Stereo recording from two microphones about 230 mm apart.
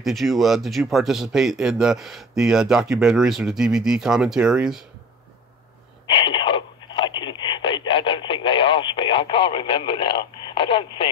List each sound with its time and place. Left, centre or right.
0.0 s speech: centre
6.0 s radio: left